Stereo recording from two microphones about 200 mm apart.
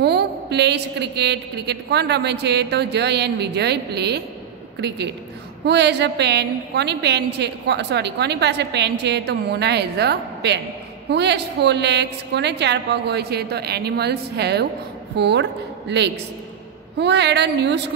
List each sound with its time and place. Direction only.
0.0 s a woman's voice: 55° right (ahead or behind)